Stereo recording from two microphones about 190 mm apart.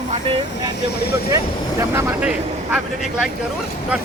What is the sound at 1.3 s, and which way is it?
Speech, 15° right (ahead or behind).